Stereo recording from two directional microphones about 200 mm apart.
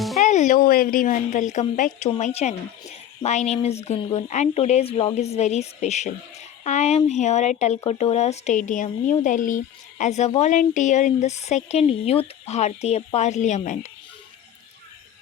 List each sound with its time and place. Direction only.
0.2 s speech: 40° left (ahead or behind)